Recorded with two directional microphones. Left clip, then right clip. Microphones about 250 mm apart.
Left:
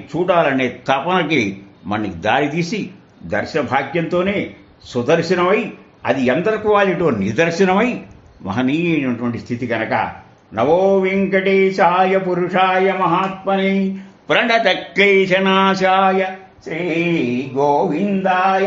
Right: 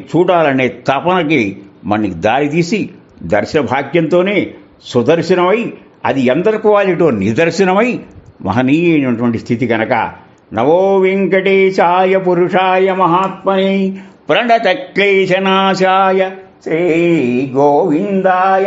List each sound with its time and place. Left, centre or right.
0.1 s a man's voice: right
14.2 s a man's voice: right